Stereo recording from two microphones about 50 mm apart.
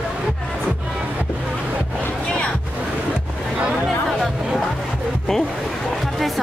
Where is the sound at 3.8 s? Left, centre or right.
Centre.